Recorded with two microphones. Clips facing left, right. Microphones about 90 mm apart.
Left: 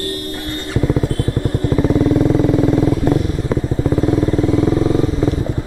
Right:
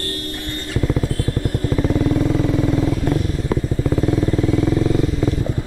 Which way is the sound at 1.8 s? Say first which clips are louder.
Left 5 dB; 20° left (ahead or behind).